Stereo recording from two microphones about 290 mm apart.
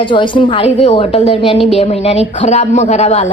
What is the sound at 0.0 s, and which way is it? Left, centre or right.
A woman's voice, centre.